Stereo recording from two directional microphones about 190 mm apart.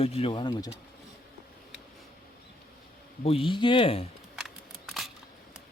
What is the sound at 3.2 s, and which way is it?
Speech, 30° left (ahead or behind).